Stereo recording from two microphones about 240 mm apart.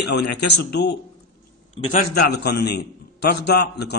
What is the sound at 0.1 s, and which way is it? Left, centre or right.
Speech, left.